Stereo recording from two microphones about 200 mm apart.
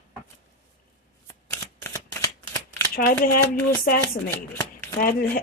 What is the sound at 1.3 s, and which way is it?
Shuffling cards, 15° left (ahead or behind).